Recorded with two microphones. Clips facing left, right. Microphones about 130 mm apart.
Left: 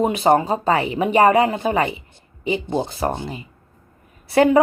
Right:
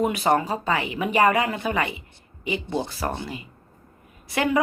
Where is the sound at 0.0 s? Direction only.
25° left (ahead or behind).